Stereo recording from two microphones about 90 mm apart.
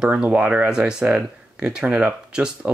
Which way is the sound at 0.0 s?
10° right (ahead or behind).